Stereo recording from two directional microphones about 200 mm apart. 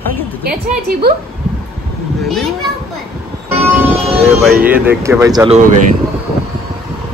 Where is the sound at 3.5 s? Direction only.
10° right (ahead or behind).